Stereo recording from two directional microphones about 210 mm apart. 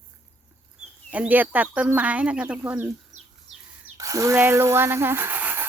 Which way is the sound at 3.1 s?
35° right (ahead or behind).